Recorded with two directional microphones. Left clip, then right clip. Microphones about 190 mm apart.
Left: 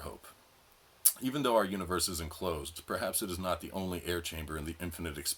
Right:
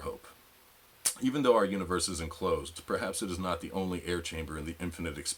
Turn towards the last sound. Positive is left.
turn(degrees=-25)  # may be behind; listen again after turning